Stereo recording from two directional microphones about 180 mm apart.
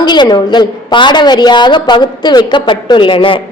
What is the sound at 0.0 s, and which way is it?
A woman's voice, 25° left (ahead or behind).